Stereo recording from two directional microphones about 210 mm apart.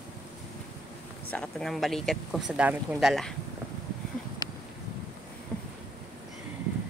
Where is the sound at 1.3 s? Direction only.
Centre (ahead or behind).